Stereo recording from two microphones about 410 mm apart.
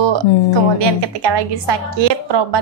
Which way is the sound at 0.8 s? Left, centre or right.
Right.